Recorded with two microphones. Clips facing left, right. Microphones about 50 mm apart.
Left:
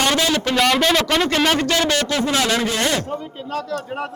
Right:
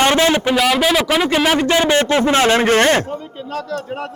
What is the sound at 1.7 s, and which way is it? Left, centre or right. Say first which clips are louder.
A man's voice: right 5 dB; right.